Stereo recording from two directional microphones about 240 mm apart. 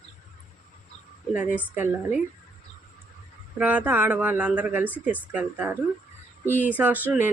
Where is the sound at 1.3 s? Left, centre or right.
Centre.